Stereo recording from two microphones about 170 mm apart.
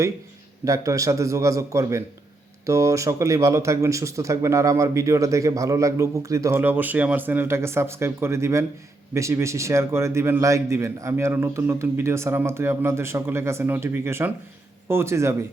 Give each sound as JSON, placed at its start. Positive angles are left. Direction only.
{"t": 0.6, "sound": "a man's voice", "side_deg": -20}